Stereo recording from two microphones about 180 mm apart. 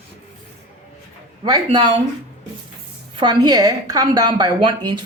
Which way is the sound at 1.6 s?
25° right (ahead or behind).